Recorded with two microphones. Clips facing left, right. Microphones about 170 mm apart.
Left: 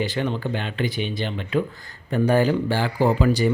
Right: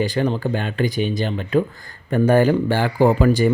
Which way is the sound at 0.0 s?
40° right (ahead or behind).